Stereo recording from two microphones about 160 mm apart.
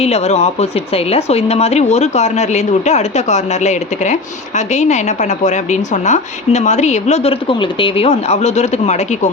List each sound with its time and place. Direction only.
0.0 s a woman's voice: 40° left (ahead or behind)